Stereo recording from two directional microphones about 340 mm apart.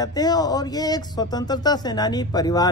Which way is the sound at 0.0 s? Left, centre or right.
Centre.